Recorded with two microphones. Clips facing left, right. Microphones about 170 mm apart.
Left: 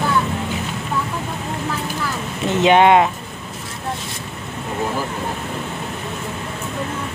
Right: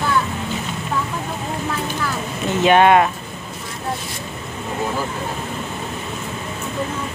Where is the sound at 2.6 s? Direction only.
20° left (ahead or behind).